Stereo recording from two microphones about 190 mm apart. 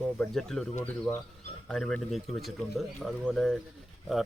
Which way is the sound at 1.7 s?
Centre (ahead or behind).